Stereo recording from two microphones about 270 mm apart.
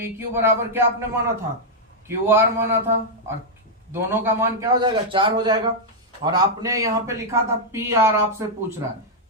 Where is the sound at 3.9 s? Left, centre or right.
Centre.